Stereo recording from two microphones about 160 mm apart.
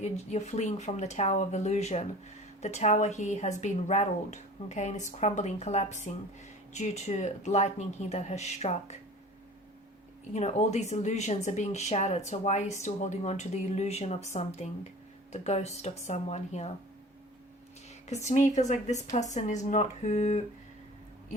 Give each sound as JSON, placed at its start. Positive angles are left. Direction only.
{"t": 0.0, "sound": "speech", "side_deg": 45}
{"t": 10.3, "sound": "speech", "side_deg": 45}
{"t": 18.1, "sound": "speech", "side_deg": 45}